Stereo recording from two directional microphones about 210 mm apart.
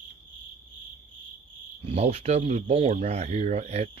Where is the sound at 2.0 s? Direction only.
30° right (ahead or behind).